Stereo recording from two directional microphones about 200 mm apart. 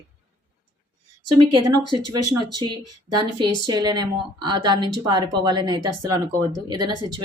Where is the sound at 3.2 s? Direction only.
20° right (ahead or behind).